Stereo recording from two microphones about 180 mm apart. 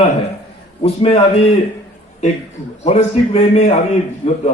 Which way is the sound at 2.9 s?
35° left (ahead or behind).